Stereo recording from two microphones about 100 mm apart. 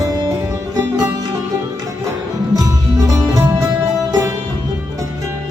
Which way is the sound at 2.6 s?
35° right (ahead or behind).